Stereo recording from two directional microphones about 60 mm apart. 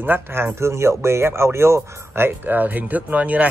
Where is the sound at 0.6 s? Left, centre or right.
Right.